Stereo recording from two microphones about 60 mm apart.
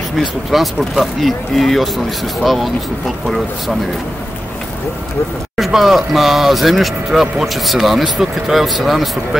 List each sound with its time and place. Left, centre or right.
0.5 s speech: centre
5.6 s speech: centre